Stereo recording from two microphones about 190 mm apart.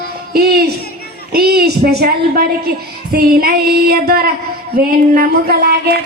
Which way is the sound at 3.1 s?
55° right (ahead or behind).